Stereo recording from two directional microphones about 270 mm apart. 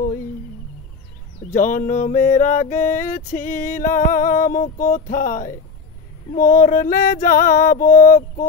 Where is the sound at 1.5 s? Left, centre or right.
Left.